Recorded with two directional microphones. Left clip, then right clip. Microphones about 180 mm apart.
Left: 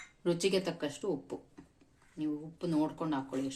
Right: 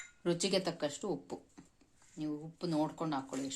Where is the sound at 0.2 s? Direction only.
40° right (ahead or behind).